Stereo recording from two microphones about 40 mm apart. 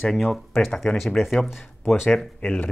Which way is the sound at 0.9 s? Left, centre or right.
Left.